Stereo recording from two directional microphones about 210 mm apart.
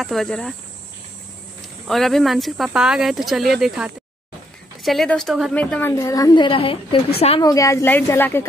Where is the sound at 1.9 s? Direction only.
Centre (ahead or behind); by 7.4 s 30° left (ahead or behind).